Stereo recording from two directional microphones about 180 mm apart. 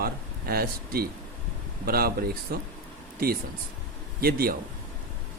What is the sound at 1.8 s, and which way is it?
Speech, 55° right (ahead or behind).